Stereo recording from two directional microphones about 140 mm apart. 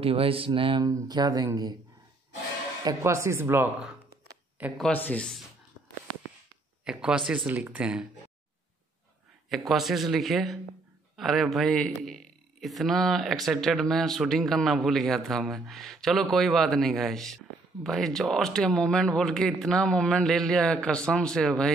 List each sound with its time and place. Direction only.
0.0 s speech: 40° right (ahead or behind); by 1.8 s 25° right (ahead or behind)
2.8 s speech: 25° right (ahead or behind)
4.9 s speech: 10° left (ahead or behind)
6.8 s speech: 5° right (ahead or behind)
9.5 s a man's voice: centre (ahead or behind)